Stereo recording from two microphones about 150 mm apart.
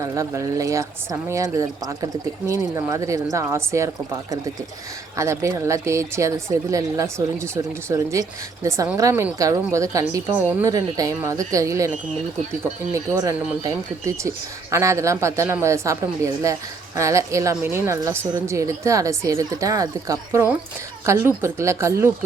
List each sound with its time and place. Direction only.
0.0 s a woman's voice: 20° right (ahead or behind)
5.1 s a woman's voice: 20° right (ahead or behind)
12.9 s a woman's voice: 20° right (ahead or behind)